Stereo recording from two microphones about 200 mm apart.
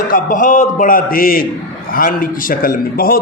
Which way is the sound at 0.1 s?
40° left (ahead or behind).